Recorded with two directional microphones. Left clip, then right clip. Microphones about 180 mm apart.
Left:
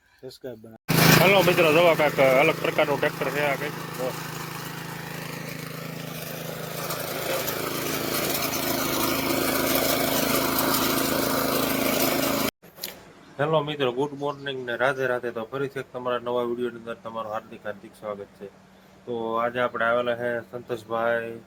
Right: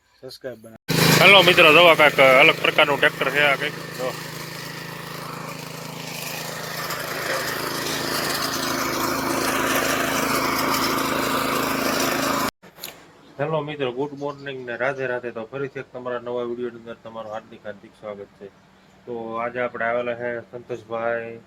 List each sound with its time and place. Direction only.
1.2 s speech: centre (ahead or behind)
6.5 s lawn mower: 35° left (ahead or behind)
9.9 s lawn mower: 35° left (ahead or behind); by 10.8 s 20° left (ahead or behind)
10.8 s lawn mower: 35° left (ahead or behind)
13.4 s speech: centre (ahead or behind)
19.3 s speech: 5° left (ahead or behind)